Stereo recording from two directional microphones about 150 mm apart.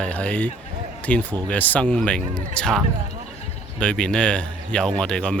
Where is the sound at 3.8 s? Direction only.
5° left (ahead or behind).